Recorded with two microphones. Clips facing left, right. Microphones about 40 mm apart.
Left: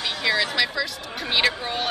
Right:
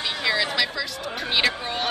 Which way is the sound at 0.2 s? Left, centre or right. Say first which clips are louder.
Left 1 dB; centre.